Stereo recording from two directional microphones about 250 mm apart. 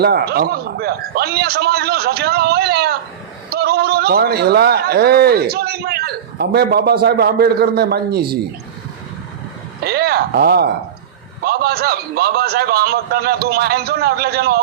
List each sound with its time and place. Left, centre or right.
0.0 s a man's voice: right
9.8 s a man's voice: right